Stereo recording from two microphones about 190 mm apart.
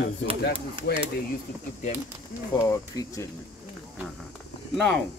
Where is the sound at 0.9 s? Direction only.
55° left (ahead or behind).